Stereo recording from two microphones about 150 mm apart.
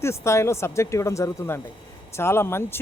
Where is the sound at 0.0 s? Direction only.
20° left (ahead or behind).